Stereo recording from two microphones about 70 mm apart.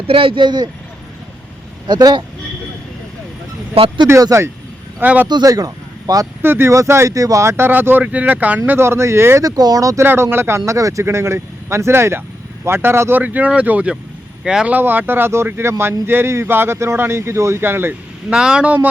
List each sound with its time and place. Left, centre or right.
0.4 s speech: right
1.9 s speech: right
4.3 s speech: right
4.9 s speech: right
5.3 s speech: right
6.4 s speech: right
6.7 s speech: right
7.7 s speech: right
9.4 s speech: right
10.0 s speech: right
11.0 s speech: right; by 14.7 s centre
14.7 s speech: right
18.3 s speech: centre